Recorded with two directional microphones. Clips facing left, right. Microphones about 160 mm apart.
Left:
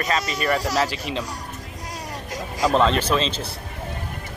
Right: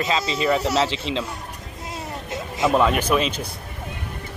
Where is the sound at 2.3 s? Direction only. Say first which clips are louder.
Right 1 dB; 25° right (ahead or behind).